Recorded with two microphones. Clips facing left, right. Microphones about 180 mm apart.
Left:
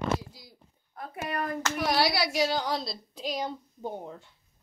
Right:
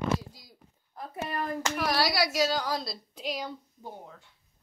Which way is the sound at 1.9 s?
25° left (ahead or behind).